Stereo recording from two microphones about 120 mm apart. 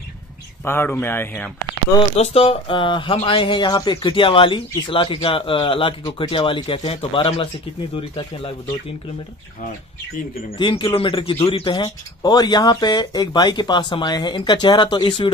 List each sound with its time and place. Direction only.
0.7 s speech: 20° left (ahead or behind)
2.1 s speech: 60° left (ahead or behind)
10.6 s speech: 45° left (ahead or behind)